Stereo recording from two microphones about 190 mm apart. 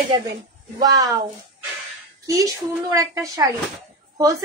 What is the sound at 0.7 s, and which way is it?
Speech, 20° right (ahead or behind).